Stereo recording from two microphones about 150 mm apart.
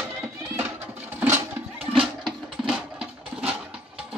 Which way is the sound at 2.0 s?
5° right (ahead or behind).